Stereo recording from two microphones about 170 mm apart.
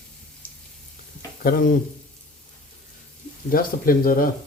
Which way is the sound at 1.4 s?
60° left (ahead or behind).